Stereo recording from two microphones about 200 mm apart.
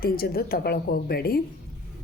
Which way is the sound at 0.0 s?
50° left (ahead or behind).